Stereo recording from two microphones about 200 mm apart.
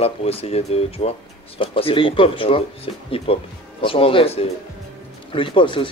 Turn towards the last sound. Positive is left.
turn(degrees=25)  # may be behind; listen again after turning